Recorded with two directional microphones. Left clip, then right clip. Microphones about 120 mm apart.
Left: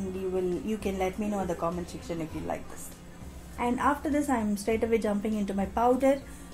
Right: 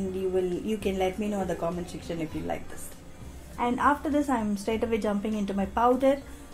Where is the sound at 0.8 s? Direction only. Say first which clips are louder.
Right 3 dB; 30° right (ahead or behind).